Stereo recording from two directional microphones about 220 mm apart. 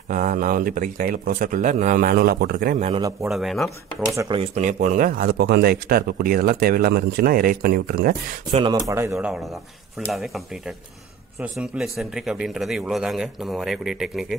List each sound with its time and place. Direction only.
0.1 s speech: 35° right (ahead or behind)
2.9 s a man's voice: 15° right (ahead or behind)
3.3 s a man's voice: centre (ahead or behind)
4.1 s a man's voice: 15° right (ahead or behind)
4.4 s a man's voice: 35° right (ahead or behind)
8.5 s speech: 30° right (ahead or behind)
8.8 s a man's voice: 10° right (ahead or behind)